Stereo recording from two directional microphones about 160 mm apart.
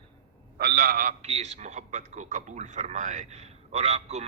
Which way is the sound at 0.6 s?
75° right (ahead or behind).